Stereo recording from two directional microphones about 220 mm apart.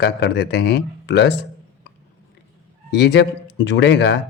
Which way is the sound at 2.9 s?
50° left (ahead or behind).